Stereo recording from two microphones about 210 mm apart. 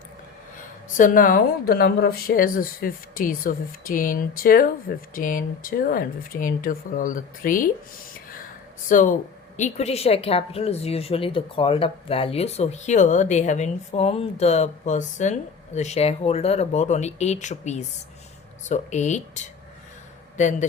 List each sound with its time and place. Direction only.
0.9 s a woman's voice: 40° left (ahead or behind)